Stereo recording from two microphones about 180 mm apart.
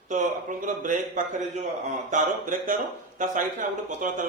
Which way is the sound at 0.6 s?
45° right (ahead or behind).